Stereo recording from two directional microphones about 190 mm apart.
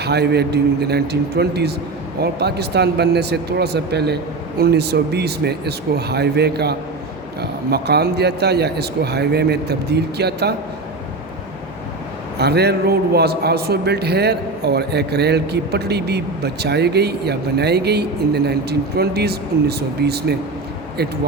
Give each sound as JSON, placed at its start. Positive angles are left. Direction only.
{"t": 0.0, "sound": "a man's voice", "side_deg": -60}
{"t": 12.4, "sound": "a man's voice", "side_deg": -60}